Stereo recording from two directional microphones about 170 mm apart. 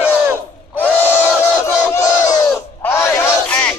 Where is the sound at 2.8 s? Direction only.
15° left (ahead or behind).